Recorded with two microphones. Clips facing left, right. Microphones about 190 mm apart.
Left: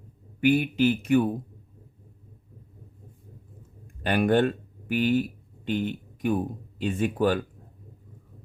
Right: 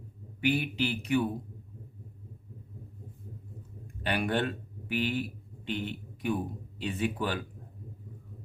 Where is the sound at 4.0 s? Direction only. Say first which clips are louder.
Left 8 dB; 45° left (ahead or behind).